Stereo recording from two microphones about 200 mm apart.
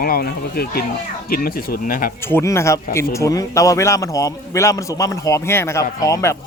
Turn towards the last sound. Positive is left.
turn(degrees=15)  # may be behind; listen again after turning